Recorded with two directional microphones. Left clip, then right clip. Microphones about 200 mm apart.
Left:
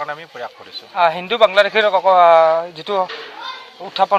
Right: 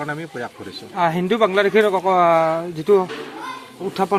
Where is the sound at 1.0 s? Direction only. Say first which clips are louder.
Left 4 dB; 35° left (ahead or behind).